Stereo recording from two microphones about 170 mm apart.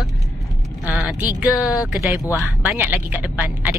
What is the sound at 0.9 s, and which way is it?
Speech, centre (ahead or behind).